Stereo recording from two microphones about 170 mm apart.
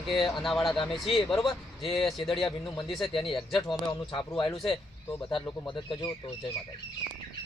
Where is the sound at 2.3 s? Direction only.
30° left (ahead or behind).